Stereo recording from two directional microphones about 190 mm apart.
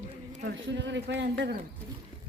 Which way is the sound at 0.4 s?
70° right (ahead or behind).